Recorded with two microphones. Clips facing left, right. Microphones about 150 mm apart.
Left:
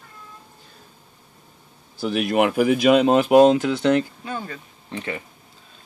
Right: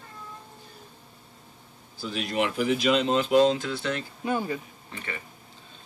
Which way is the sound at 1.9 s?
65° left (ahead or behind).